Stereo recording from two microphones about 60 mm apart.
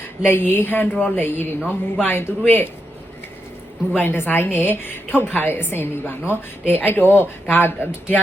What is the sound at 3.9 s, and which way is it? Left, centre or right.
A woman's voice, left.